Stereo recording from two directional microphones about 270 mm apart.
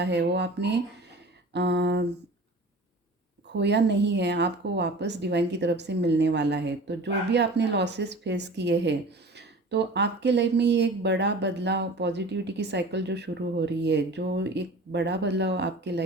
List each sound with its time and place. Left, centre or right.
0.0 s speech: right
3.5 s speech: right